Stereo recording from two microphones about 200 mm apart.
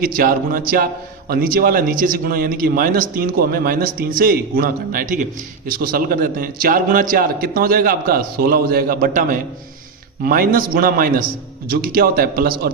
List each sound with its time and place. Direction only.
0.0 s speech: 45° right (ahead or behind)